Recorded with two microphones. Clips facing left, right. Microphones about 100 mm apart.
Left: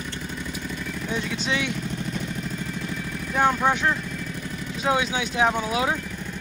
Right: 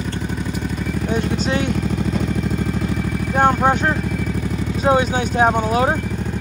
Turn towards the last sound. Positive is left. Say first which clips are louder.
# right 7 dB
turn(degrees=-45)  # may be behind; listen again after turning